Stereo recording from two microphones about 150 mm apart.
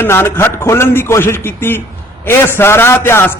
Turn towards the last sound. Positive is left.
turn(degrees=15)  # may be behind; listen again after turning